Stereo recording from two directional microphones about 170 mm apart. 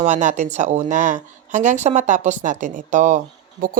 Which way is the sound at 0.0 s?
45° right (ahead or behind).